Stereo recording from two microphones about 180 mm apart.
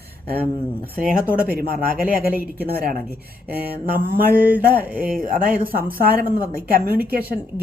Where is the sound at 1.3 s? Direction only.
55° right (ahead or behind).